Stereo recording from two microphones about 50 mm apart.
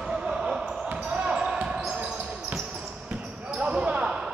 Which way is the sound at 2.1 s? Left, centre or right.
Right.